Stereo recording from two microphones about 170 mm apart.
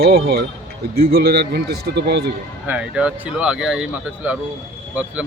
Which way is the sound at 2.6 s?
10° right (ahead or behind).